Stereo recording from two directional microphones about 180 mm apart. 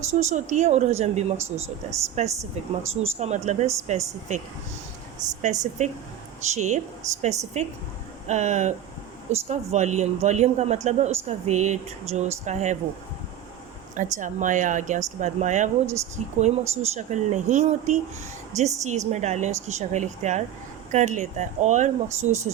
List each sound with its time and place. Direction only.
0.1 s speech: 40° right (ahead or behind)
5.4 s speech: 40° right (ahead or behind)
13.9 s speech: 45° right (ahead or behind)